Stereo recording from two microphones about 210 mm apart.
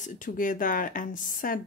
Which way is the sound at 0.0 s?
40° left (ahead or behind).